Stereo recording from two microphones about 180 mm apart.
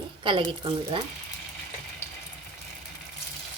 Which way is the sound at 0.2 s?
30° right (ahead or behind).